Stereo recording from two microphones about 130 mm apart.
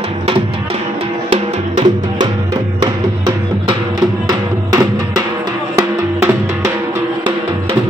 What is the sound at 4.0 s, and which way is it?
Music, 25° right (ahead or behind).